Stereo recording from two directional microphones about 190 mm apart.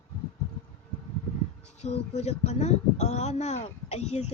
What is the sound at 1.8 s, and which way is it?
Speech, 35° left (ahead or behind).